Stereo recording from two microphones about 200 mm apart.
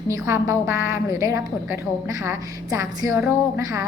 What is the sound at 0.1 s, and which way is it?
A woman's voice, 15° right (ahead or behind).